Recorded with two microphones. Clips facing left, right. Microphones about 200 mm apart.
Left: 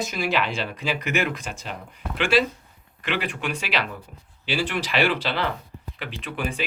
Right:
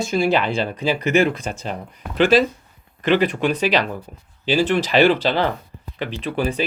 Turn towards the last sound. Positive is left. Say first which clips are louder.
# right 7 dB
turn(degrees=-35)  # may be behind; listen again after turning